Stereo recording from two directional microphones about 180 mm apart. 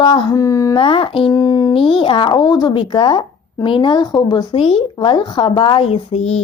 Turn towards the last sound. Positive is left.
turn(degrees=35)  # may be behind; listen again after turning